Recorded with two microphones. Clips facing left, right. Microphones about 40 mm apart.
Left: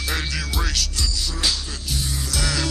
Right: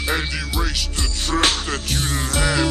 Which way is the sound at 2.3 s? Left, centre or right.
Right.